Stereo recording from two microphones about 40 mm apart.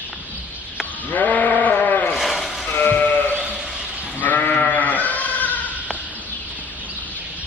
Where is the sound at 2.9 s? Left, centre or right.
Left.